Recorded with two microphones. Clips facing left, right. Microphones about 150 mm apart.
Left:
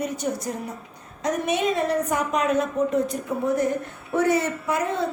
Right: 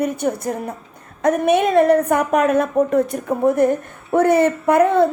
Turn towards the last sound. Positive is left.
turn(degrees=-55)  # may be behind; listen again after turning